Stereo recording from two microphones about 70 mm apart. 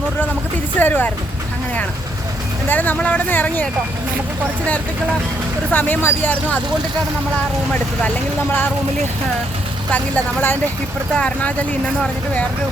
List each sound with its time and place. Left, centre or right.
0.8 s speech: left
2.6 s speech: left
5.7 s speech: left
9.9 s speech: left